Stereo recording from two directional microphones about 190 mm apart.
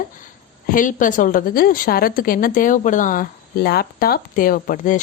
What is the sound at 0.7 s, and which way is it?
A woman's voice, 45° left (ahead or behind).